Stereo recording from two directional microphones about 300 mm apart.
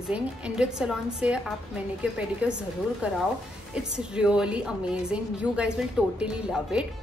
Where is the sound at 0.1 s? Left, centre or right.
Centre.